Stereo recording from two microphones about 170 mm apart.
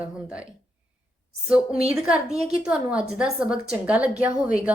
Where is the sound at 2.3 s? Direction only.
40° right (ahead or behind).